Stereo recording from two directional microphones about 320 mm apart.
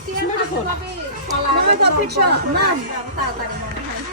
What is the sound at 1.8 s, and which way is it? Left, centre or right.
Speech, right.